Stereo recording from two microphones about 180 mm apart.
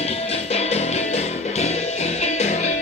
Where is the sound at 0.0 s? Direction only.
35° left (ahead or behind).